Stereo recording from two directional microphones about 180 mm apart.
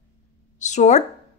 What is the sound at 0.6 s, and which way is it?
Speech, 40° left (ahead or behind).